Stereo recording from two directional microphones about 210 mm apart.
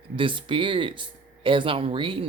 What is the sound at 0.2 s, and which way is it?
Speech, 25° right (ahead or behind).